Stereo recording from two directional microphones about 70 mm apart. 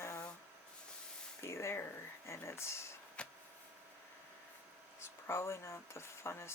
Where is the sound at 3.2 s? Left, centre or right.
Centre.